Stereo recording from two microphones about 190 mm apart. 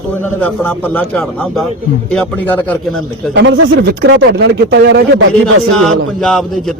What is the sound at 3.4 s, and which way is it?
Speech, 70° right (ahead or behind).